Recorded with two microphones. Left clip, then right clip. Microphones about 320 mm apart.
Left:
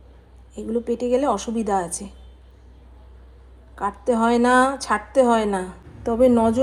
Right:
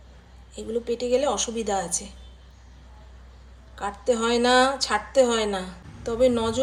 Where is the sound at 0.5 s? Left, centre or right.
Left.